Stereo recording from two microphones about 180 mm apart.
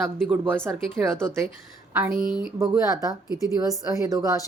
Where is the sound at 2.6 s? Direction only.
15° right (ahead or behind).